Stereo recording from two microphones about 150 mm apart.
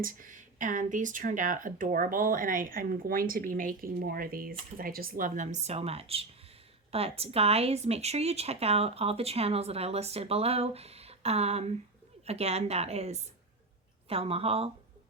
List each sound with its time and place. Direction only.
0.0 s speech: 65° right (ahead or behind); by 14.7 s 40° right (ahead or behind)